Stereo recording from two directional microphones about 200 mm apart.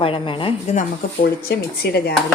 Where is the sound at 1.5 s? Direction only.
50° left (ahead or behind).